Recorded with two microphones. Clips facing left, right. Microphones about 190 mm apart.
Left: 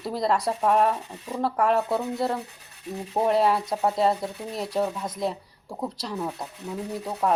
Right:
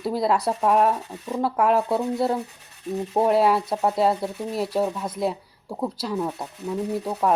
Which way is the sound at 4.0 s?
5° right (ahead or behind).